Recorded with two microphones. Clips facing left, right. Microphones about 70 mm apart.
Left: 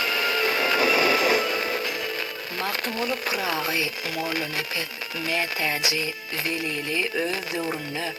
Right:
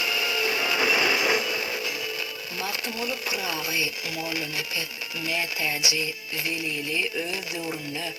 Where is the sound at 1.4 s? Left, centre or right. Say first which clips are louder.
Left 4 dB; left.